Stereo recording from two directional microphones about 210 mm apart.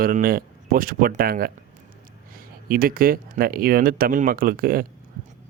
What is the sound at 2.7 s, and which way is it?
Speech, 45° right (ahead or behind).